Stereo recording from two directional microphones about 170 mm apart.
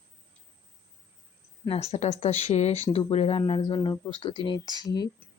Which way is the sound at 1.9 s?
40° left (ahead or behind).